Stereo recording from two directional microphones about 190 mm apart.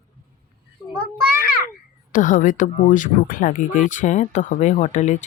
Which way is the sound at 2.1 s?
40° left (ahead or behind).